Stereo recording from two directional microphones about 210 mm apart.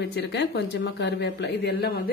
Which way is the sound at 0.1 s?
55° left (ahead or behind).